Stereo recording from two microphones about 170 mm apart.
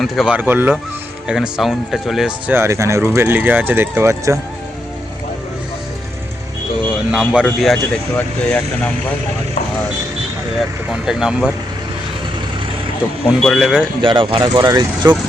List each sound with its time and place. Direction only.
0.0 s speech: 5° right (ahead or behind)
2.6 s speech: 15° right (ahead or behind)
7.1 s speech: 5° right (ahead or behind)
10.6 s speech: 5° right (ahead or behind)
13.4 s speech: centre (ahead or behind)
14.0 s speech: 30° right (ahead or behind)